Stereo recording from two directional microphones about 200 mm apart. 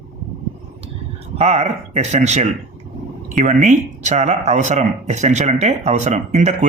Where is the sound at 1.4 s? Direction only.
35° right (ahead or behind).